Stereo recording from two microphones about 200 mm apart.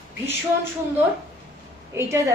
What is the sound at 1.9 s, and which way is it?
Speech, 15° right (ahead or behind).